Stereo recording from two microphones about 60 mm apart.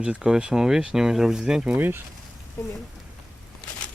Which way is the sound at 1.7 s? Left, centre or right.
Right.